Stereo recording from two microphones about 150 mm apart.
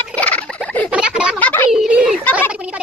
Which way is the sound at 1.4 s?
10° left (ahead or behind).